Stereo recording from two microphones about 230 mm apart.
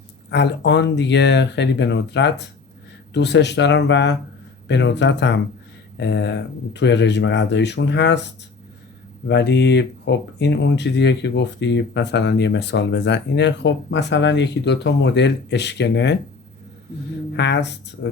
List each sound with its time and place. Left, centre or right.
0.3 s speech: left
9.2 s speech: left
17.3 s speech: left